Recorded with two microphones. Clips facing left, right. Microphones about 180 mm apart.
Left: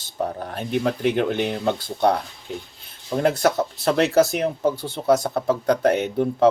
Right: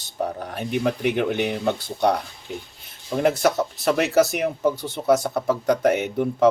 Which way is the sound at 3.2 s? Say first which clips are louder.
Even; 15° right (ahead or behind).